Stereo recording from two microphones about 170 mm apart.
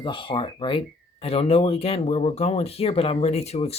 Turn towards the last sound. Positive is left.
turn(degrees=35)  # may be behind; listen again after turning